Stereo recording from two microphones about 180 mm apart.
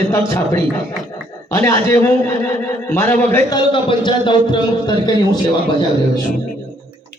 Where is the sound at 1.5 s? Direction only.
20° left (ahead or behind).